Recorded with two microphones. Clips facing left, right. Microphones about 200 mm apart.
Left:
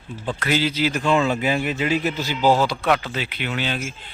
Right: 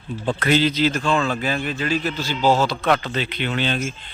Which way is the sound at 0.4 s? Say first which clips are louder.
Right 3 dB; 10° left (ahead or behind).